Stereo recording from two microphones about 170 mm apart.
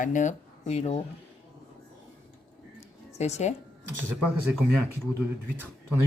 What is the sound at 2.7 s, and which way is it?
Music, 40° left (ahead or behind).